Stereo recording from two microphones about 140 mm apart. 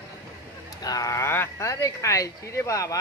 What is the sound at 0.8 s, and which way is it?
Speech, 25° left (ahead or behind).